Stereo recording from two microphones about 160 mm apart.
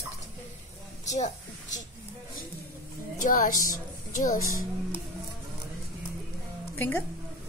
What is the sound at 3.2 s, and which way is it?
A woman's voice, 55° left (ahead or behind).